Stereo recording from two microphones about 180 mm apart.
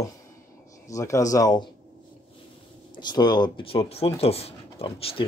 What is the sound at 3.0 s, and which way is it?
Speech, 25° left (ahead or behind).